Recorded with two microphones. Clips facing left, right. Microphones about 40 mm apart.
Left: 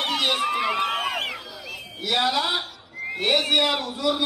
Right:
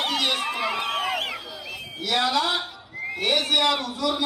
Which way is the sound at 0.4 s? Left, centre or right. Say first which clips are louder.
Left 3 dB; centre.